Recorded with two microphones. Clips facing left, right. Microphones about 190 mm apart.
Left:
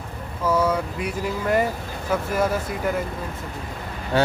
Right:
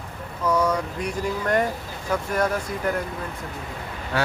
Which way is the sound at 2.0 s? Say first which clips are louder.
Left 1 dB; 5° left (ahead or behind).